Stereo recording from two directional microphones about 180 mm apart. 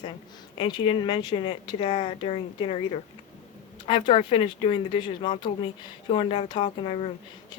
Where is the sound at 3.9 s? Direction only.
30° left (ahead or behind).